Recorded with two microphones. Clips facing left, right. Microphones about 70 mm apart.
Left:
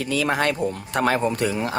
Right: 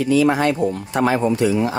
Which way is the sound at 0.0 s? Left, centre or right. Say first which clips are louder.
Right 8 dB; left.